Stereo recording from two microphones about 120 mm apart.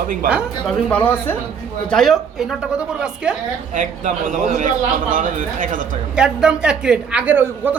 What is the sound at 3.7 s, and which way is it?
A man's voice, 90° right.